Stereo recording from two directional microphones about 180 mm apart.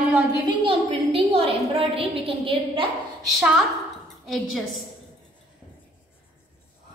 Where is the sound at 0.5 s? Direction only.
30° right (ahead or behind).